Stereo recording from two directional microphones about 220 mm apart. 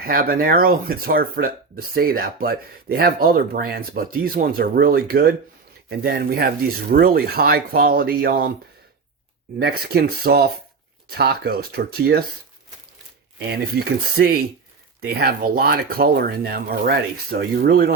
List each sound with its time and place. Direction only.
0.0 s speech: 45° right (ahead or behind)
9.6 s speech: 45° right (ahead or behind)
13.5 s speech: 45° right (ahead or behind)